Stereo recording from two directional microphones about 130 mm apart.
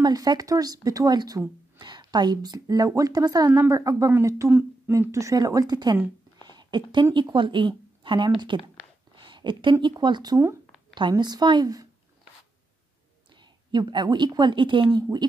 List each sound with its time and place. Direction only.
0.0 s a woman's voice: 30° right (ahead or behind)
6.4 s a sound: 35° right (ahead or behind)
7.2 s a woman's voice: 40° right (ahead or behind)
13.4 s a woman's voice: 35° right (ahead or behind)